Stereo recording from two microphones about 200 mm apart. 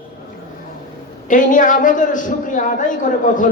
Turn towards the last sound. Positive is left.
turn(degrees=40)  # may be behind; listen again after turning